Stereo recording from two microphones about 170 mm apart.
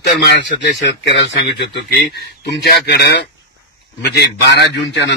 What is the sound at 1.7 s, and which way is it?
A man's voice, 75° left (ahead or behind).